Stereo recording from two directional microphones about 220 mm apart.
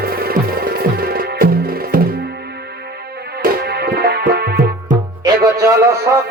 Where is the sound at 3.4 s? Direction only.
45° right (ahead or behind).